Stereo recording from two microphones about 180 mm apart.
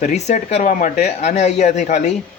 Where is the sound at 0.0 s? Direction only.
40° left (ahead or behind).